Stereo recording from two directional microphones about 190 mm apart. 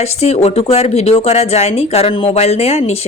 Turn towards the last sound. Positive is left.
turn(degrees=35)  # may be behind; listen again after turning